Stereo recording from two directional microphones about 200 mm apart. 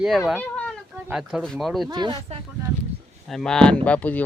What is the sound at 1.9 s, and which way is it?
Speech, 20° right (ahead or behind).